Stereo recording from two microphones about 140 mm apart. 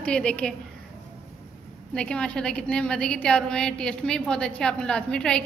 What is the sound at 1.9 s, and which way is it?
A woman's voice, 5° left (ahead or behind).